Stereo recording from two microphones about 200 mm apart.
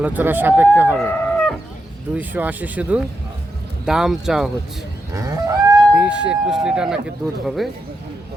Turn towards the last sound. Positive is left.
turn(degrees=0)  # may be behind; listen again after turning